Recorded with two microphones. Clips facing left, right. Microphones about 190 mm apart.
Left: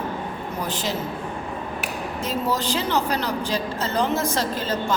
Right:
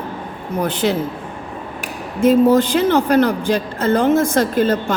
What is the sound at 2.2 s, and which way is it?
A woman's voice, 55° right (ahead or behind).